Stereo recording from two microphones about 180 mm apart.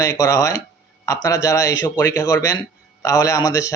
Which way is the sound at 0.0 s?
20° left (ahead or behind).